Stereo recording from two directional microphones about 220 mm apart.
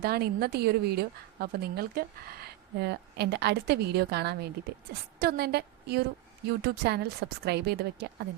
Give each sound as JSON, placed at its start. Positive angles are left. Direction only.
{"t": 0.0, "sound": "a woman's voice", "side_deg": -45}